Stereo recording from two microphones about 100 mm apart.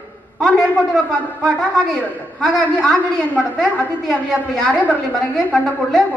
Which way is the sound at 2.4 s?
5° left (ahead or behind).